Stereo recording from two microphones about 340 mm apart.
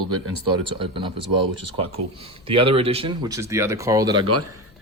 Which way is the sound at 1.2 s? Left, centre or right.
Right.